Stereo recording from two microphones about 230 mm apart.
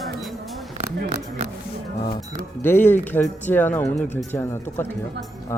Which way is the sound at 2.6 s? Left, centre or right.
Centre.